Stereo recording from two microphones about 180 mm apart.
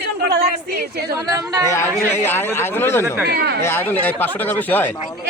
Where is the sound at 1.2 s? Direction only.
20° right (ahead or behind).